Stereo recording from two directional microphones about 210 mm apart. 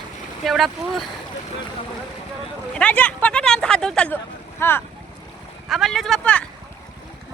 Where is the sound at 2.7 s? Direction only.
5° left (ahead or behind).